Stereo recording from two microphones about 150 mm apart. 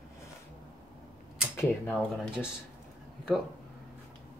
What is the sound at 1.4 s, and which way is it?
Speech, 15° left (ahead or behind).